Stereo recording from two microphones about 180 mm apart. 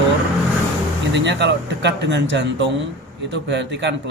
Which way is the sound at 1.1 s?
75° right (ahead or behind).